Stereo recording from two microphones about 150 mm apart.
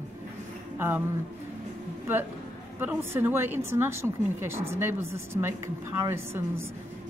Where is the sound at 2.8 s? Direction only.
15° right (ahead or behind).